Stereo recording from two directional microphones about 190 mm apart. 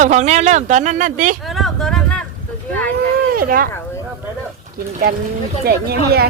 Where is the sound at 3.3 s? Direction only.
50° right (ahead or behind).